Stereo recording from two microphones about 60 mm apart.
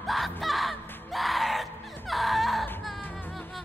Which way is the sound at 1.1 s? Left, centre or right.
Centre.